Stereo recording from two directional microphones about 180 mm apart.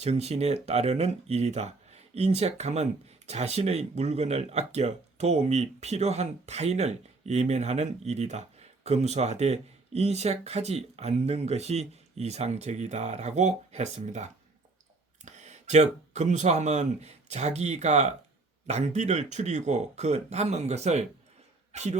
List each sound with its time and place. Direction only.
0.0 s speech: 35° right (ahead or behind)